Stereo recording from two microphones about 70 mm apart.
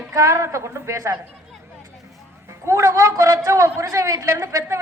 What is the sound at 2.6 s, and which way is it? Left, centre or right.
A woman's voice, right.